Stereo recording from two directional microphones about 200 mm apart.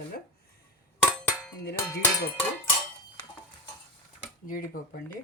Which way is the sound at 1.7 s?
15° left (ahead or behind).